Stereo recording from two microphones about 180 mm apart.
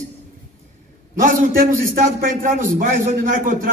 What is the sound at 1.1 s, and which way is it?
A man's voice, 50° right (ahead or behind).